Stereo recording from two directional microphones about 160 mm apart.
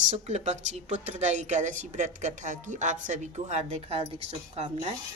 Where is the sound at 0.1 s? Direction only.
45° right (ahead or behind).